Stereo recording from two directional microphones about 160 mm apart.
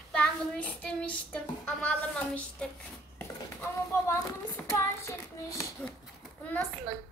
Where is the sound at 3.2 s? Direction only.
15° left (ahead or behind).